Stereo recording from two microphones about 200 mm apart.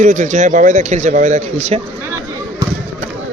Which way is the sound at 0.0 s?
40° right (ahead or behind).